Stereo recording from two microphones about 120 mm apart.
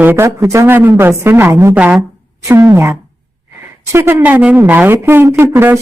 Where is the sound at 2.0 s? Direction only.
25° right (ahead or behind).